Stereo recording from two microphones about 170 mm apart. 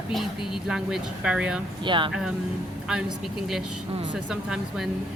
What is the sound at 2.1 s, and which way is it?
Speech, 5° right (ahead or behind).